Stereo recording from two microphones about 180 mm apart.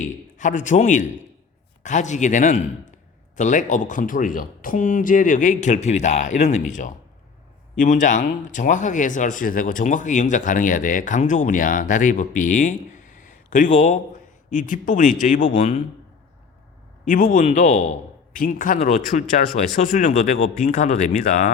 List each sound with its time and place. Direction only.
0.0 s speech: 45° left (ahead or behind)
17.1 s a man's voice: 50° left (ahead or behind)